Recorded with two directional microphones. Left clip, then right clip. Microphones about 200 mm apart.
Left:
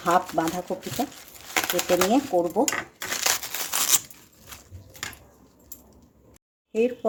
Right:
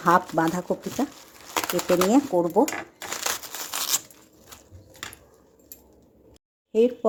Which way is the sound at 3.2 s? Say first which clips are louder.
Left 4 dB; centre (ahead or behind).